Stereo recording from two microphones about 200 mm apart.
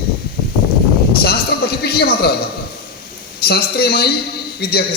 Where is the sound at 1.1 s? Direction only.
50° left (ahead or behind).